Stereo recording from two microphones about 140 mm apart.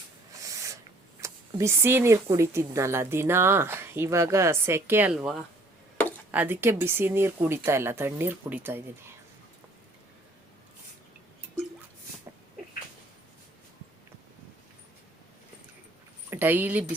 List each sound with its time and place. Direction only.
0.5 s a sound: 25° right (ahead or behind)
1.2 s speech: 20° right (ahead or behind)
5.1 s speech: centre (ahead or behind)
6.3 s speech: 15° right (ahead or behind)
16.3 s speech: 15° right (ahead or behind)